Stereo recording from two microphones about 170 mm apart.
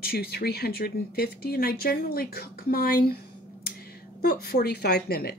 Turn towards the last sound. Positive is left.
turn(degrees=65)  # may be behind; listen again after turning